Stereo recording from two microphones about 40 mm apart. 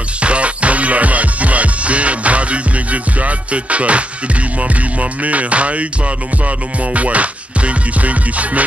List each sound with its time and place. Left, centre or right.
0.2 s music: right
5.2 s music: right